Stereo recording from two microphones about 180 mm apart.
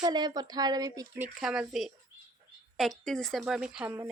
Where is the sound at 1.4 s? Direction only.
Centre (ahead or behind).